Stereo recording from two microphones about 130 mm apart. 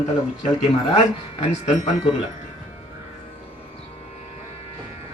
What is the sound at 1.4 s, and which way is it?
Speech, 55° left (ahead or behind).